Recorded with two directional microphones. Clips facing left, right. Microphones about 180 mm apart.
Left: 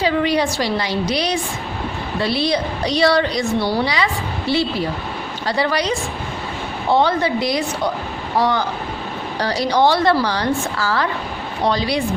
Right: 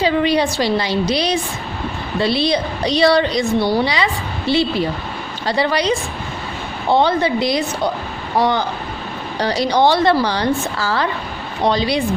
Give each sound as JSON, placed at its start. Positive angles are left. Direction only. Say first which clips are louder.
{"t": 0.0, "sound": "a woman's voice", "louder": "right 2 dB", "side_deg": -25}
{"t": 6.9, "sound": "a woman's voice", "louder": "right 1 dB", "side_deg": -25}